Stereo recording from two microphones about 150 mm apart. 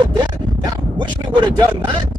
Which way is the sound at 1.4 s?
30° right (ahead or behind).